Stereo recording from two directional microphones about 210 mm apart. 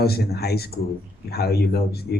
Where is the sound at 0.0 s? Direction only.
50° left (ahead or behind).